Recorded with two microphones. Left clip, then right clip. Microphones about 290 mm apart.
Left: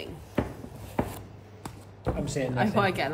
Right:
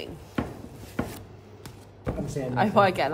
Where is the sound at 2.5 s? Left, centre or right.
Centre.